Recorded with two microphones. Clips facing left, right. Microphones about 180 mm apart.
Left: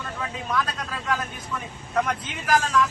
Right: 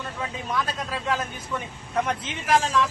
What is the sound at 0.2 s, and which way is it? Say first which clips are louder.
Speech: left 1 dB; 25° right (ahead or behind).